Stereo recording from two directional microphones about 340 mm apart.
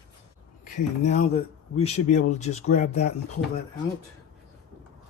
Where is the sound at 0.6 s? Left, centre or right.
Left.